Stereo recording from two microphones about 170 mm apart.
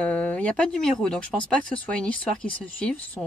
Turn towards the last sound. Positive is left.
turn(degrees=10)  # may be behind; listen again after turning